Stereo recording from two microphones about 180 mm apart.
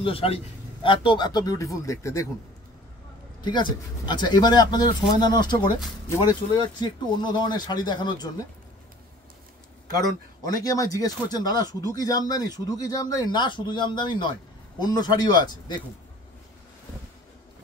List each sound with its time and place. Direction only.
0.0 s a man's voice: 30° left (ahead or behind)
3.4 s speech: 25° left (ahead or behind)
10.4 s speech: 20° left (ahead or behind)